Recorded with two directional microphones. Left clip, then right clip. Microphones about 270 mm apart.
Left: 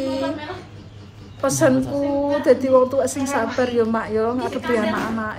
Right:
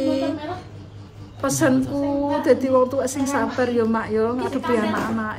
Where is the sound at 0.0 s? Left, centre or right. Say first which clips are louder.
Right 2 dB; centre.